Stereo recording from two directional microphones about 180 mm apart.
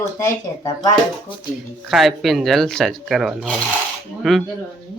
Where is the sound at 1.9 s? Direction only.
Centre (ahead or behind).